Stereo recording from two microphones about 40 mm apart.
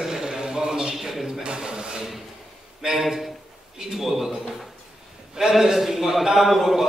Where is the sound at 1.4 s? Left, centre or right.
Right.